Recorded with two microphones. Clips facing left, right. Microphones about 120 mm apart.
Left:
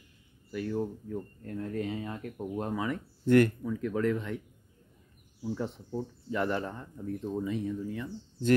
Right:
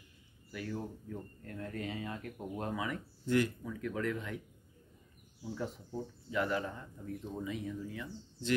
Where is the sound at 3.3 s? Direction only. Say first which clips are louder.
Left 8 dB; 55° left (ahead or behind).